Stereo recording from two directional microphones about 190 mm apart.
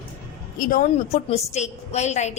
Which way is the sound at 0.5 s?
45° left (ahead or behind).